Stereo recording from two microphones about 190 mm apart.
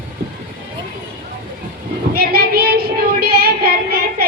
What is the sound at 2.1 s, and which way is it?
Child singing, 50° right (ahead or behind).